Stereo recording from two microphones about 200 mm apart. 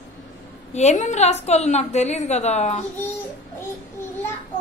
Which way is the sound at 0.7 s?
35° left (ahead or behind).